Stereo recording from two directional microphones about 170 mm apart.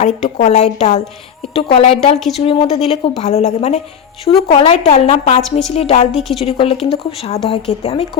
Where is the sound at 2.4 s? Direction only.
35° left (ahead or behind).